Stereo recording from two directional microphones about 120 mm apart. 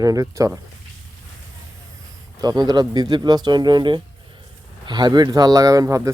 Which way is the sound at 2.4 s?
35° right (ahead or behind).